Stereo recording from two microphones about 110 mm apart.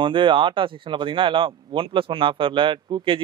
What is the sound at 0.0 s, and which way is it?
Speech, 50° right (ahead or behind).